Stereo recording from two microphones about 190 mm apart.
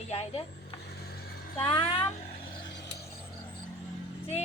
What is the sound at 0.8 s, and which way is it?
Vehicle, 55° left (ahead or behind).